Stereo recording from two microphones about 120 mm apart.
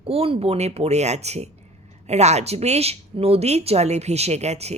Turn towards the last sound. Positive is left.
turn(degrees=-65)  # may be behind; listen again after turning